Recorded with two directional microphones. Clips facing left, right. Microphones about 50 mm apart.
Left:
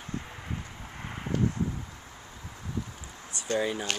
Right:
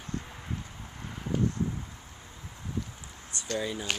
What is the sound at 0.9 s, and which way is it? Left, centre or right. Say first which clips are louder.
Vehicle: left 2 dB; left.